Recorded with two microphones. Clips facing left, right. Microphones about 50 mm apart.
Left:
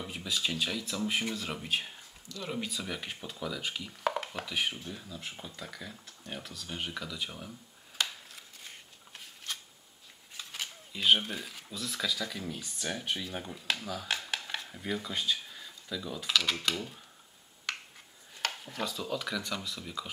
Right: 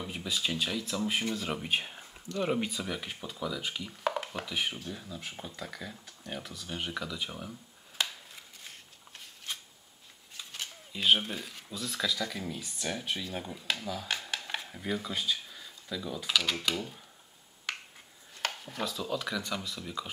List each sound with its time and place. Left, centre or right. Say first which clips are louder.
0.0 s speech: even; centre
2.2 s speech: right 7 dB; right
2.7 s speech: right 1 dB; centre
10.9 s speech: even; centre
17.7 s finger snapping: even; centre
18.6 s speech: right 1 dB; centre